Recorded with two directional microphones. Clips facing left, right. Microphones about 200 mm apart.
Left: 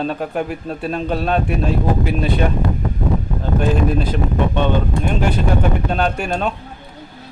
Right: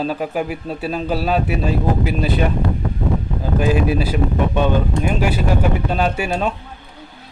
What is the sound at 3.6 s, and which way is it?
Speech, 5° right (ahead or behind).